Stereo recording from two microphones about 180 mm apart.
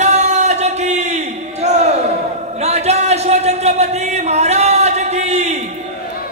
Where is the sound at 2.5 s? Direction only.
35° right (ahead or behind).